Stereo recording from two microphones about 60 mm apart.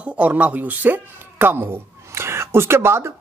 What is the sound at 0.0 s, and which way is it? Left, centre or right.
A woman's voice, right.